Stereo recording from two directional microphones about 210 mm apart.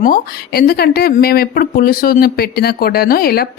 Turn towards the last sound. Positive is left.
turn(degrees=45)  # may be behind; listen again after turning